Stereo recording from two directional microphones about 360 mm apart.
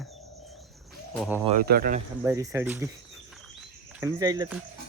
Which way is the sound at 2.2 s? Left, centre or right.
Centre.